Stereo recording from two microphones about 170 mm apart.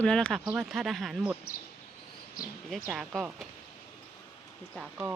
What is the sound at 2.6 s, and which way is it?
Speech, centre (ahead or behind).